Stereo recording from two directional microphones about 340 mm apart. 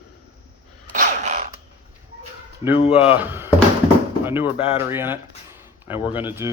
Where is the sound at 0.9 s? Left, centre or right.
Right.